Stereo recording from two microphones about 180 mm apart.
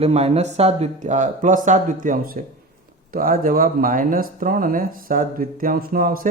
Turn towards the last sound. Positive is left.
turn(degrees=-50)  # may be behind; listen again after turning